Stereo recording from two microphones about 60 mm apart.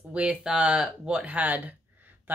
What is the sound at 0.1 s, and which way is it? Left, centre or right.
Speech, centre.